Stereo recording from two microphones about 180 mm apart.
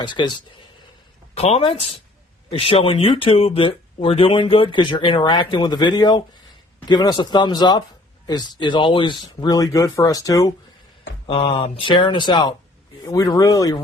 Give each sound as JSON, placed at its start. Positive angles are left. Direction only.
{"t": 0.0, "sound": "speech", "side_deg": 25}
{"t": 1.4, "sound": "speech", "side_deg": 35}
{"t": 11.3, "sound": "speech", "side_deg": 30}